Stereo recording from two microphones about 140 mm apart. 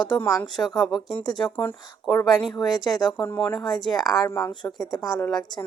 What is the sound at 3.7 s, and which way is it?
Speech, 30° left (ahead or behind).